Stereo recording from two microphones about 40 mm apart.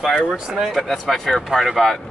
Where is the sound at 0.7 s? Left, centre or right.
Centre.